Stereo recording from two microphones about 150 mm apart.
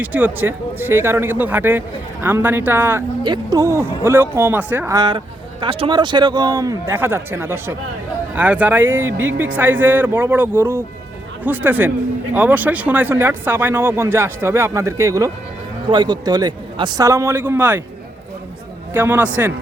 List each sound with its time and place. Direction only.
0.0 s speech: 10° right (ahead or behind)
3.2 s speech: 25° right (ahead or behind)
4.9 s a man's voice: 30° right (ahead or behind)
17.1 s speech: 20° right (ahead or behind)
18.9 s speech: 15° right (ahead or behind)